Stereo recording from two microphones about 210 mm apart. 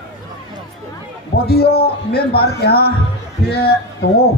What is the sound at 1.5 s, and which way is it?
Speech, 50° left (ahead or behind).